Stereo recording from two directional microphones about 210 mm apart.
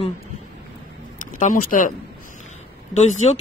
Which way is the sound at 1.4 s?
40° left (ahead or behind).